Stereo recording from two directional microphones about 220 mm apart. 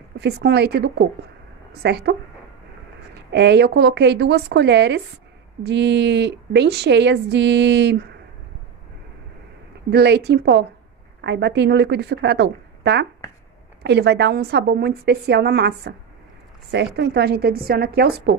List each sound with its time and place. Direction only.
0.2 s a woman's voice: 50° right (ahead or behind)
3.3 s a woman's voice: 50° right (ahead or behind)
9.8 s a woman's voice: 50° right (ahead or behind)